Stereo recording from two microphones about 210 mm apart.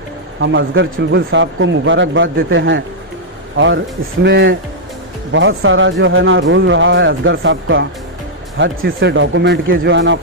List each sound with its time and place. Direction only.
0.4 s speech: 65° right (ahead or behind)